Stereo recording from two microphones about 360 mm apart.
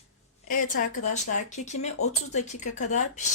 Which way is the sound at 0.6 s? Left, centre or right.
Left.